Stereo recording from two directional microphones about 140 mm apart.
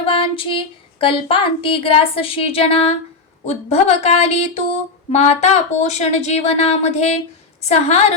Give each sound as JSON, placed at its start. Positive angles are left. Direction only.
{"t": 0.0, "sound": "female singing", "side_deg": 40}
{"t": 3.4, "sound": "speech", "side_deg": 50}